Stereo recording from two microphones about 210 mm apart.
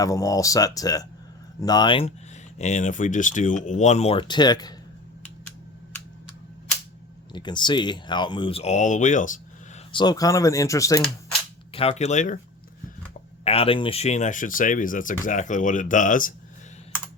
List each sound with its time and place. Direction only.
0.0 s speech: 15° left (ahead or behind)
7.3 s speech: 20° left (ahead or behind); by 9.4 s 35° left (ahead or behind)
9.9 s speech: 20° left (ahead or behind)
11.7 s speech: 30° left (ahead or behind)
13.4 s speech: 30° left (ahead or behind)